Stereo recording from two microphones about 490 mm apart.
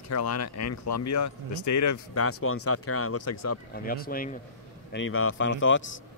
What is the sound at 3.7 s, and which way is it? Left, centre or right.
A man's voice, centre.